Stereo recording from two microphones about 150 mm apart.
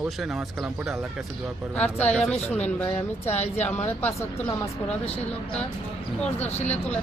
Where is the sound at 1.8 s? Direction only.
10° left (ahead or behind).